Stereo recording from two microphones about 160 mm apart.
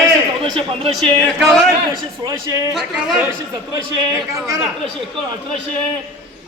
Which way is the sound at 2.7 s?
5° right (ahead or behind).